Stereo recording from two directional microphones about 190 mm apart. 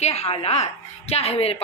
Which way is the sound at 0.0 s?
35° left (ahead or behind).